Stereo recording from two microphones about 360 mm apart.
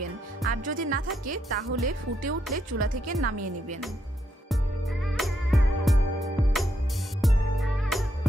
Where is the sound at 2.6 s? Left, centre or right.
Right.